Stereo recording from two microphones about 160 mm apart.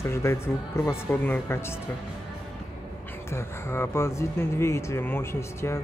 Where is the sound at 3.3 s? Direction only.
15° left (ahead or behind).